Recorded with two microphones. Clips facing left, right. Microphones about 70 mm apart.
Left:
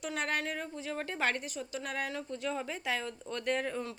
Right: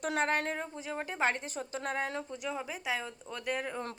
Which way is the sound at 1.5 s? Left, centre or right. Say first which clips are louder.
Right 2 dB; right.